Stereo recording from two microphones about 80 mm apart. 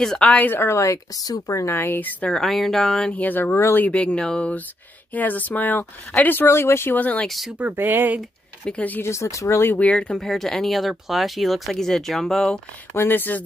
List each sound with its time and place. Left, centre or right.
0.0 s speech: centre
2.3 s speech: centre
3.1 s speech: left
3.5 s speech: left
3.8 s speech: centre
7.2 s speech: centre
7.5 s speech: right
8.6 s speech: centre
9.0 s speech: left
9.8 s speech: centre
10.1 s speech: centre
12.9 s speech: left